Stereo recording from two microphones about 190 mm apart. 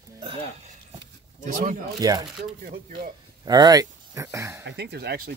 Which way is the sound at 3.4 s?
20° right (ahead or behind).